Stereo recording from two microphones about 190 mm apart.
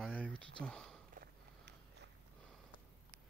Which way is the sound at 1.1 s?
55° right (ahead or behind).